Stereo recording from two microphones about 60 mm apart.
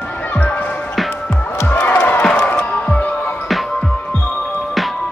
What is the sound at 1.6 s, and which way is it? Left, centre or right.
Music, left.